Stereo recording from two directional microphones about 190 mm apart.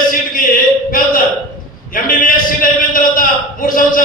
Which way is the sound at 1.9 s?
45° left (ahead or behind).